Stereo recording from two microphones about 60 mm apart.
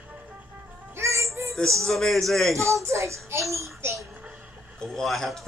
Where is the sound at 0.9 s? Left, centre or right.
Right.